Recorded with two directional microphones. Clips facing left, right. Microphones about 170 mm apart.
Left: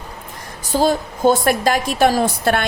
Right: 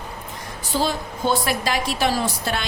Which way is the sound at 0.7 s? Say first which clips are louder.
Left 7 dB; 45° left (ahead or behind).